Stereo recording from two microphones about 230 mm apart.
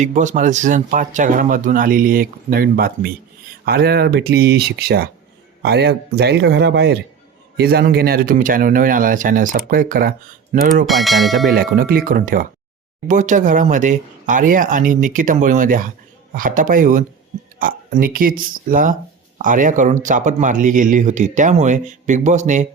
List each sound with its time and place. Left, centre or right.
0.0 s speech: right
10.8 s speech: centre
11.5 s speech: right